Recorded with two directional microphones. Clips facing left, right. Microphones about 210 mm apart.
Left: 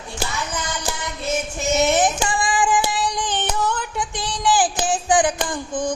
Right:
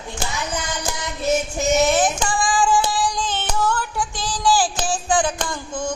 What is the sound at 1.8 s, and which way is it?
Child singing, 20° left (ahead or behind).